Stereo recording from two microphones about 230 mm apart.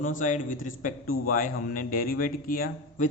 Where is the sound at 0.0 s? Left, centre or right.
Left.